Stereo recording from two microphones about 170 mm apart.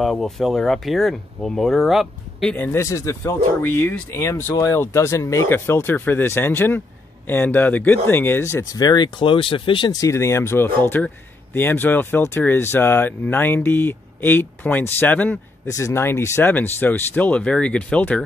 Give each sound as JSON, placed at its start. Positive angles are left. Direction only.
{"t": 0.0, "sound": "speech", "side_deg": 0}